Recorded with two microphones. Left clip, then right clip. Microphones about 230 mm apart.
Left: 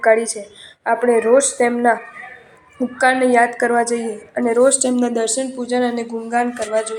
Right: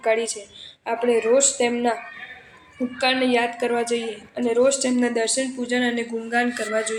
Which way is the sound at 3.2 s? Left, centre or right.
Centre.